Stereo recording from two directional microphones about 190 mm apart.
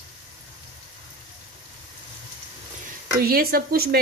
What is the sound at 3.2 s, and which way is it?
Speech, 50° right (ahead or behind).